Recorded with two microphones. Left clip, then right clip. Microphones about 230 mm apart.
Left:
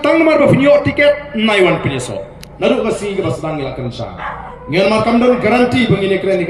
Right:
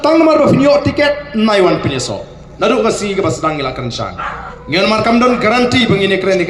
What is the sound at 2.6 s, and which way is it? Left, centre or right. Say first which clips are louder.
A man's voice: right 2 dB; right.